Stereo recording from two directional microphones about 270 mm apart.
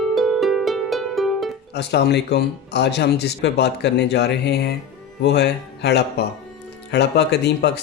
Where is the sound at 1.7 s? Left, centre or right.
Left.